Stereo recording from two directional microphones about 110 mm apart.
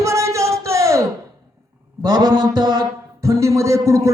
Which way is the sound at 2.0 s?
40° right (ahead or behind).